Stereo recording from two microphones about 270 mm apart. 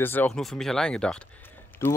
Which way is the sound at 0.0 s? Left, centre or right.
Centre.